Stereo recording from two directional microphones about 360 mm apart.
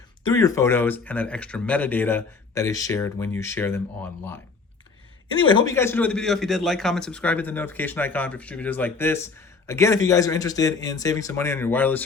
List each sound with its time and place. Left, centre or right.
0.3 s a man's voice: centre
5.4 s a man's voice: centre